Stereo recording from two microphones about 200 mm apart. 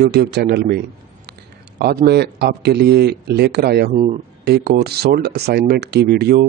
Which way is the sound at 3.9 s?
35° right (ahead or behind).